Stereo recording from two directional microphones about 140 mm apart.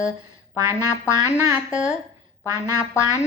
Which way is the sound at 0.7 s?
20° left (ahead or behind).